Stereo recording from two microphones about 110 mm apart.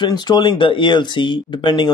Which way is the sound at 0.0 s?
40° left (ahead or behind).